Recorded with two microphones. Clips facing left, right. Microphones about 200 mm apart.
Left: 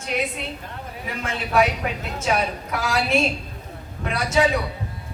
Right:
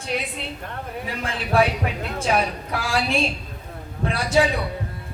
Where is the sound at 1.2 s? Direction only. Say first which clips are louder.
Even; 35° right (ahead or behind).